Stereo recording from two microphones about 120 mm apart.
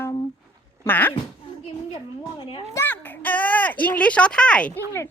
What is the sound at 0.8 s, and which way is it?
Speech, 15° left (ahead or behind).